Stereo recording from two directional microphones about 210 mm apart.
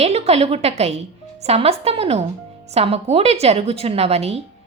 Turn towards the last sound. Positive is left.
turn(degrees=-30)  # may be behind; listen again after turning